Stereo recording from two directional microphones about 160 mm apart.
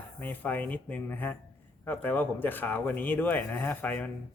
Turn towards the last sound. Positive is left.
turn(degrees=10)  # may be behind; listen again after turning